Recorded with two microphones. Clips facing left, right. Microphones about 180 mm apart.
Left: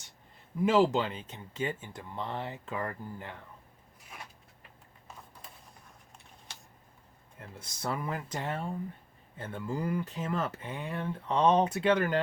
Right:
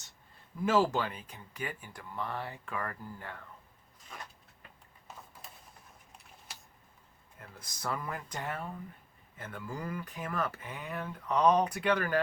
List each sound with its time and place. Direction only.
0.6 s speech: 20° left (ahead or behind)
7.3 s speech: 25° left (ahead or behind)